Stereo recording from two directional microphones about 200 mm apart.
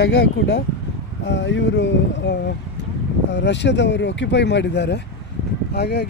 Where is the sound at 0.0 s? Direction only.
55° left (ahead or behind).